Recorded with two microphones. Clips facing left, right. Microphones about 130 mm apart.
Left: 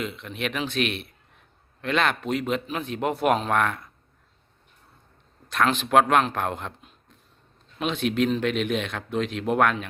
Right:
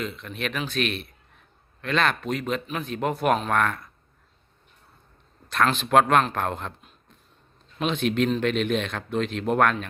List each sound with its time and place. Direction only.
0.0 s a man's voice: 20° left (ahead or behind)
5.5 s a man's voice: 15° left (ahead or behind)
7.8 s a man's voice: 5° left (ahead or behind)